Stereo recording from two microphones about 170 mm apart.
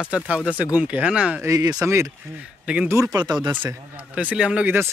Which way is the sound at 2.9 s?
20° right (ahead or behind).